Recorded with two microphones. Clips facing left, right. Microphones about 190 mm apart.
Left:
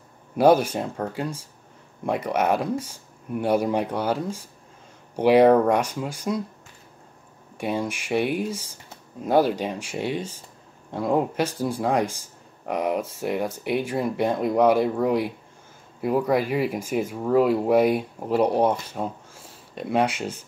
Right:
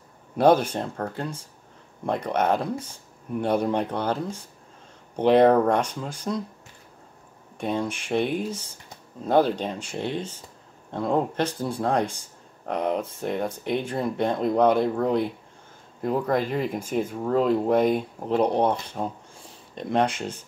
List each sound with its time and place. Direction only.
0.4 s speech: 5° left (ahead or behind)
7.5 s speech: 10° left (ahead or behind)